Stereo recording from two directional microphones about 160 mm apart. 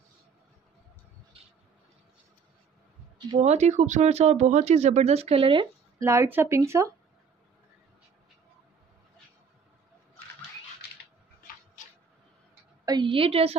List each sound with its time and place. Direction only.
3.4 s speech: 45° right (ahead or behind)
5.9 s speech: 20° right (ahead or behind)
12.8 s a woman's voice: 30° right (ahead or behind)